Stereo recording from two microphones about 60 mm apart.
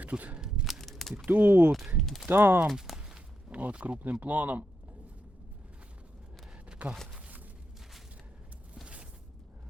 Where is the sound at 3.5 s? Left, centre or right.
Right.